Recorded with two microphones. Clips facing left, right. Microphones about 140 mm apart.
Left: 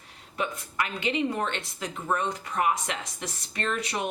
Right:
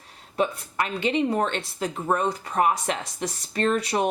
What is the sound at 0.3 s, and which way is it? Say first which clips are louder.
A woman's voice: right 5 dB; 35° right (ahead or behind).